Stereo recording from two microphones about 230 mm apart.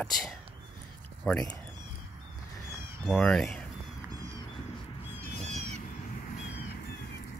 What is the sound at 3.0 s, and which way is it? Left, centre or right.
Speech, centre.